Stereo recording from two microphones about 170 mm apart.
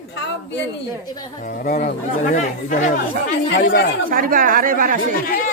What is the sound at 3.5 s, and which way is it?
Speech, 70° left (ahead or behind).